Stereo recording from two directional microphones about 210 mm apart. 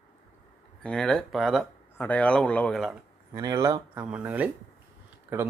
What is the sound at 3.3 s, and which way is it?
Speech, 15° right (ahead or behind).